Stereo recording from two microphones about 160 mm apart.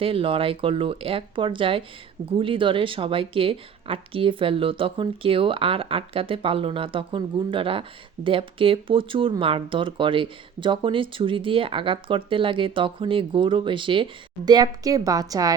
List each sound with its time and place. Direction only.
0.0 s speech: 35° right (ahead or behind)